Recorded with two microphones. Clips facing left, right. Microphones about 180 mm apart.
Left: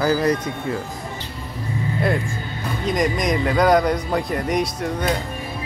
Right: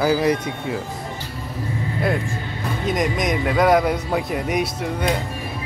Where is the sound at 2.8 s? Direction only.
Centre (ahead or behind).